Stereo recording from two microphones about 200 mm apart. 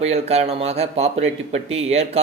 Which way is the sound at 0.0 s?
30° right (ahead or behind).